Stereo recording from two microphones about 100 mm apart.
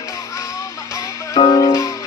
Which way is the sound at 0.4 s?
30° left (ahead or behind).